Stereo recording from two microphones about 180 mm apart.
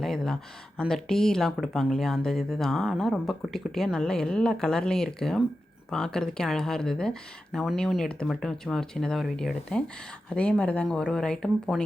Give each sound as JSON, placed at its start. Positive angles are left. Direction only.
{"t": 0.0, "sound": "speech", "side_deg": 0}